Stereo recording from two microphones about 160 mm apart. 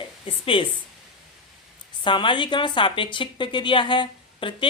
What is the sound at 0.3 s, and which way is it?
Speech, 35° left (ahead or behind).